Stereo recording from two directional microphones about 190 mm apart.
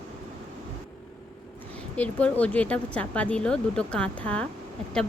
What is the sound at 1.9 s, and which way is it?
Speech, 5° left (ahead or behind).